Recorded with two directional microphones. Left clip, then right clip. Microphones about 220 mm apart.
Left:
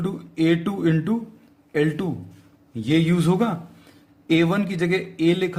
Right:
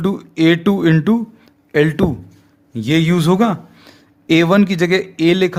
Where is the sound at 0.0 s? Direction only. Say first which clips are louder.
Right 8 dB; 45° right (ahead or behind).